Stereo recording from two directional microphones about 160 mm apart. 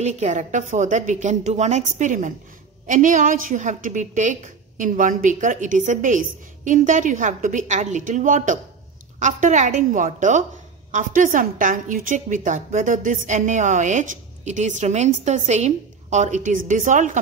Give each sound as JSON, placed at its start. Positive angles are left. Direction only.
{"t": 0.0, "sound": "a woman's voice", "side_deg": -45}